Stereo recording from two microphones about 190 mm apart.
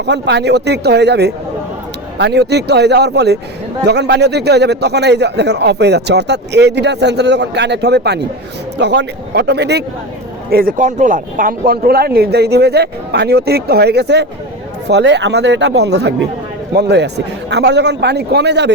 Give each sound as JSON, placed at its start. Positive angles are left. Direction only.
{"t": 0.0, "sound": "a man's voice", "side_deg": -65}